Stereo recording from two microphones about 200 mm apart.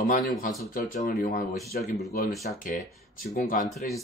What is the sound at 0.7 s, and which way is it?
Speech, 40° left (ahead or behind).